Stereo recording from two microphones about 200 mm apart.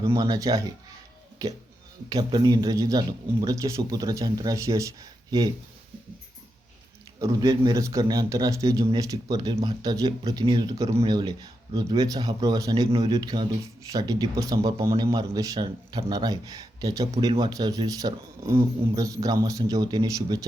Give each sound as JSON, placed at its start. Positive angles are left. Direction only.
{"t": 0.1, "sound": "a man's voice", "side_deg": -15}
{"t": 2.0, "sound": "a man's voice", "side_deg": -20}
{"t": 7.2, "sound": "a man's voice", "side_deg": -20}